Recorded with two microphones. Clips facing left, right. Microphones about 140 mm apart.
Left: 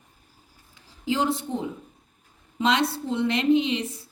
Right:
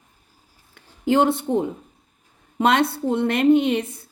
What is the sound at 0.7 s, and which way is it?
A woman's voice, 60° right (ahead or behind).